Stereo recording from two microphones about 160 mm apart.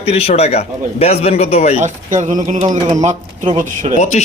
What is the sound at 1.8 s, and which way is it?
Speech, 50° right (ahead or behind).